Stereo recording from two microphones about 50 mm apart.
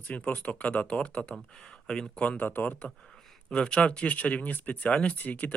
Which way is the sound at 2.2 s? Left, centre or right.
Left.